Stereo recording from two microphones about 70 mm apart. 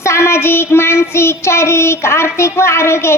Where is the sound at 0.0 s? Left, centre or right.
Left.